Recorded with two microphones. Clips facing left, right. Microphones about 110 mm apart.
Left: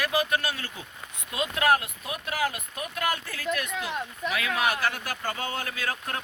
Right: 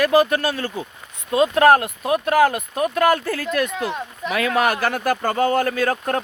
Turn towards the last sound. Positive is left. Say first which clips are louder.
# right 11 dB
turn(degrees=-45)  # may be behind; listen again after turning